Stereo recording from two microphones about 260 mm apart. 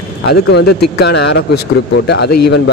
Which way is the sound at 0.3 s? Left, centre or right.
Left.